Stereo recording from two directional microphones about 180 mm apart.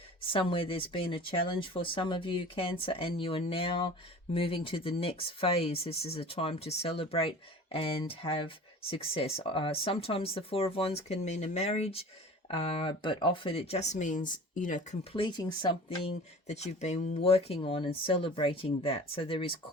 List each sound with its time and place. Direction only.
0.3 s speech: 30° left (ahead or behind); by 14.9 s 45° left (ahead or behind)
15.1 s speech: 25° left (ahead or behind)
16.5 s speech: 40° left (ahead or behind)